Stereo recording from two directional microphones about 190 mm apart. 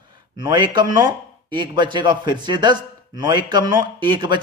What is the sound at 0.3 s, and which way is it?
A man's voice, 25° right (ahead or behind).